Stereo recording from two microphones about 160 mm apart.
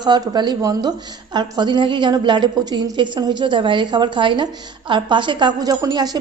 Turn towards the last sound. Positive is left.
turn(degrees=-25)  # may be behind; listen again after turning